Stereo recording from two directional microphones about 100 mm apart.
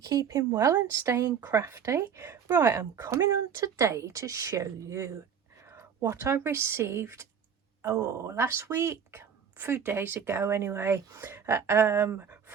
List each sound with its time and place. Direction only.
0.0 s speech: 40° right (ahead or behind); by 12.5 s 25° right (ahead or behind)